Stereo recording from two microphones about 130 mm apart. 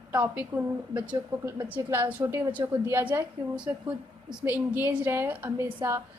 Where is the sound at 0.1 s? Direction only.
15° right (ahead or behind).